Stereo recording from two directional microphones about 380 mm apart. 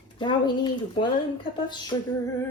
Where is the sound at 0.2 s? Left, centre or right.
Centre.